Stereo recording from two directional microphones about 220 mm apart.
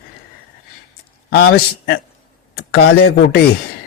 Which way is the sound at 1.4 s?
45° left (ahead or behind).